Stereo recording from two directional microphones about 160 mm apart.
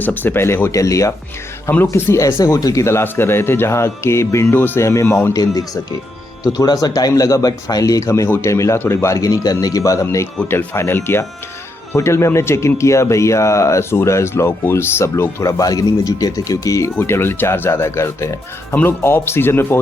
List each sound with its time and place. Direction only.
0.0 s speech: 10° left (ahead or behind)